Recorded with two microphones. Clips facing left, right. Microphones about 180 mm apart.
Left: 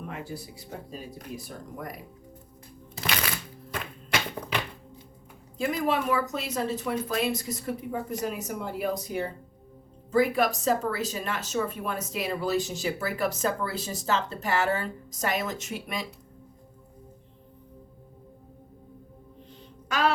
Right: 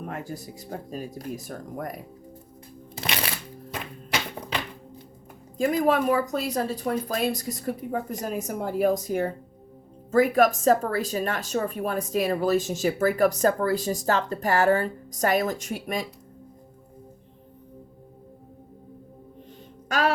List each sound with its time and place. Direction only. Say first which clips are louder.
0.0 s speech: right 3 dB; 45° right (ahead or behind)
3.0 s shuffling cards: right 1 dB; 30° right (ahead or behind)
5.5 s speech: right 5 dB; 40° right (ahead or behind)